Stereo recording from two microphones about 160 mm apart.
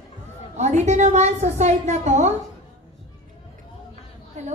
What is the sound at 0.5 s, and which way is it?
A woman's voice, 45° right (ahead or behind).